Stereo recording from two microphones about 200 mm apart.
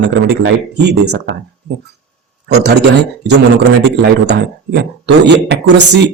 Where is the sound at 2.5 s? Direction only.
55° right (ahead or behind).